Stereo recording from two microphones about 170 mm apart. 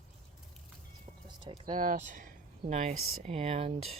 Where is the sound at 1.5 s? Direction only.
30° right (ahead or behind).